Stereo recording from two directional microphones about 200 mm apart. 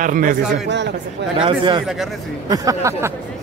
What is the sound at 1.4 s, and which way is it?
Speech, 25° right (ahead or behind).